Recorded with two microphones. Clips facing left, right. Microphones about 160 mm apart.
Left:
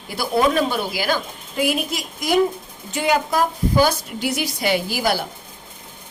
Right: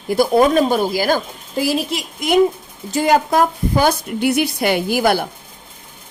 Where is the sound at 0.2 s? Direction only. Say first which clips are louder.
Right 5 dB; 45° right (ahead or behind); by 2.4 s 25° right (ahead or behind).